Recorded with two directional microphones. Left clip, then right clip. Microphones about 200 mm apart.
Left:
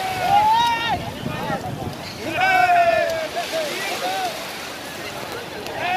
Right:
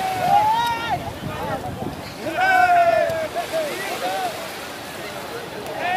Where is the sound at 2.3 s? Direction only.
20° right (ahead or behind).